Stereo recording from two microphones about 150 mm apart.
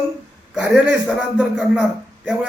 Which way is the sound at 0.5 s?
5° right (ahead or behind).